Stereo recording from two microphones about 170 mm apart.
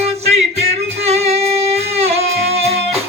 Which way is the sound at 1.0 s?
40° right (ahead or behind).